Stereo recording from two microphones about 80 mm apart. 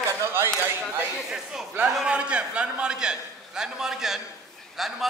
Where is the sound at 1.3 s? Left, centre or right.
Centre.